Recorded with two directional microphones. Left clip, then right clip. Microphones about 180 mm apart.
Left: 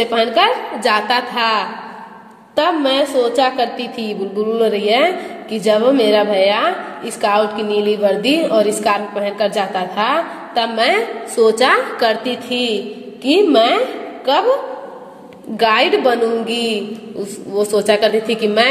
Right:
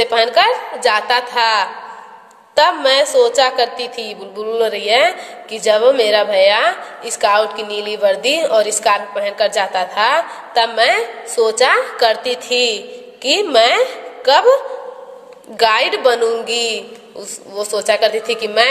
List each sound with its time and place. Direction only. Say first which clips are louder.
0.0 s a woman's voice: right 1 dB; 25° right (ahead or behind)
17.5 s a woman's voice: left 2 dB; 10° right (ahead or behind)